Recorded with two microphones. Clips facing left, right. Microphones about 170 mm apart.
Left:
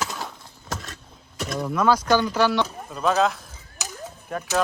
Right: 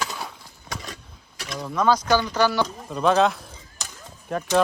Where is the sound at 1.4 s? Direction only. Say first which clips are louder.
Left 5 dB; 50° left (ahead or behind).